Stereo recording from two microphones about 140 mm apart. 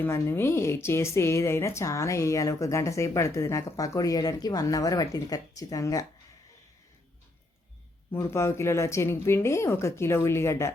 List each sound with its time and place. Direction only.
0.0 s a woman's voice: 15° left (ahead or behind)
8.1 s a woman's voice: 20° left (ahead or behind)